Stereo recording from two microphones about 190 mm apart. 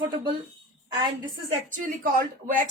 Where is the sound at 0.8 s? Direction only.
25° right (ahead or behind).